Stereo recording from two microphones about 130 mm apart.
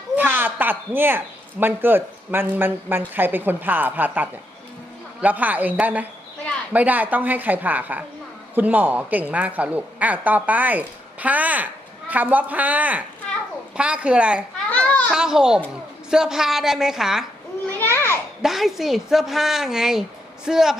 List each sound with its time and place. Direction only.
0.2 s a woman's voice: 15° right (ahead or behind)
14.7 s children playing: 10° left (ahead or behind)
15.1 s a woman's voice: 5° right (ahead or behind)
17.7 s children playing: 15° left (ahead or behind)
18.4 s a woman's voice: centre (ahead or behind)